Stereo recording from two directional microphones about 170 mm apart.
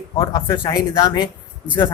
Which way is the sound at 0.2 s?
25° left (ahead or behind).